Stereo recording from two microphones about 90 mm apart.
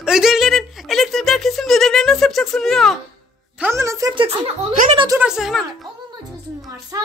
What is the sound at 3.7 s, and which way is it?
Speech, 35° right (ahead or behind).